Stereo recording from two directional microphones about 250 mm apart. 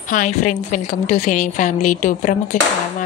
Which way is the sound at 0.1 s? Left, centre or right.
Left.